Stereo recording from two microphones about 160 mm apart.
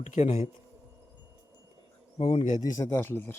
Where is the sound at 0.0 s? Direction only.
45° left (ahead or behind).